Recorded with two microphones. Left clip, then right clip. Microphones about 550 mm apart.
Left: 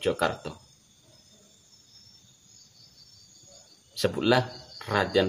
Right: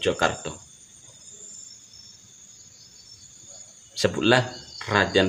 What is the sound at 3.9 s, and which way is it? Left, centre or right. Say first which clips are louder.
Speech: right 4 dB; left.